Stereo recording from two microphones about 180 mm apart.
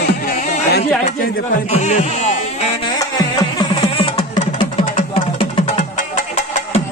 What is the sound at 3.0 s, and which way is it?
Music, 25° left (ahead or behind).